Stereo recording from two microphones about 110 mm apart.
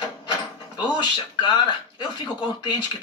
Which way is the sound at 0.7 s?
45° left (ahead or behind).